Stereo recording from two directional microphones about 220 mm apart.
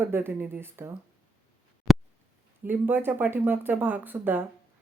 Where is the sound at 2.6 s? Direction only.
10° right (ahead or behind).